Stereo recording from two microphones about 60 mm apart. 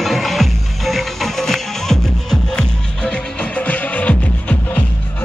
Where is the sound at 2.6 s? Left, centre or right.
Centre.